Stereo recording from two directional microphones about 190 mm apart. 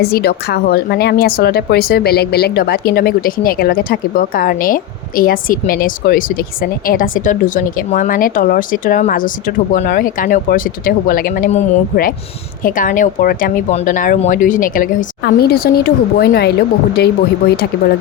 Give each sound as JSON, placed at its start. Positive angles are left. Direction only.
{"t": 0.0, "sound": "speech", "side_deg": 55}